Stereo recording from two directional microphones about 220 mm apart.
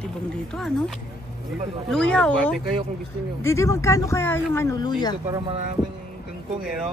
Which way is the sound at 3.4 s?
10° left (ahead or behind).